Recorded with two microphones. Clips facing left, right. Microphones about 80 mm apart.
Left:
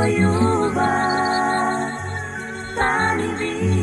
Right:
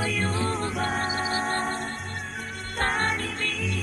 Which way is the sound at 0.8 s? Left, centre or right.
Left.